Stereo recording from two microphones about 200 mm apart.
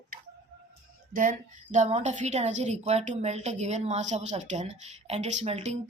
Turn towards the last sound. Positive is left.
turn(degrees=-35)  # may be behind; listen again after turning